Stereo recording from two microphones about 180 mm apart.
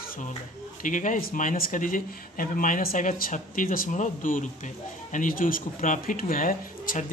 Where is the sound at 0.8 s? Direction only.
45° left (ahead or behind).